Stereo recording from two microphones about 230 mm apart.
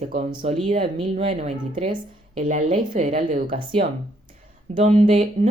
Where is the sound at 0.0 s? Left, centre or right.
Right.